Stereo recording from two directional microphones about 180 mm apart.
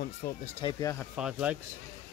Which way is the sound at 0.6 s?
20° left (ahead or behind).